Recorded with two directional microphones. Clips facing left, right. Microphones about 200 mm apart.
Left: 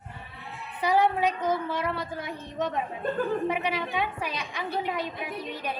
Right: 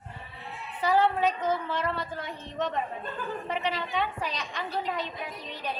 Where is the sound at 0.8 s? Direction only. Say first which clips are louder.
Left 1 dB; 15° left (ahead or behind).